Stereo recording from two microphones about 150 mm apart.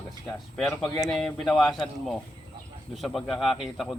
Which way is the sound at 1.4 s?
Centre (ahead or behind).